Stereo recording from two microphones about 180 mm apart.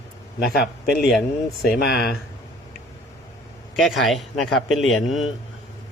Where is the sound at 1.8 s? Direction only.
65° left (ahead or behind).